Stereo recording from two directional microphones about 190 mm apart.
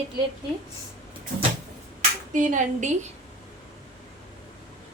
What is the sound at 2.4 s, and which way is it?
Speech, 40° right (ahead or behind).